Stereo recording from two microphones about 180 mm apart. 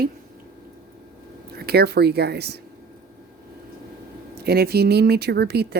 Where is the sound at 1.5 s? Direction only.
60° right (ahead or behind).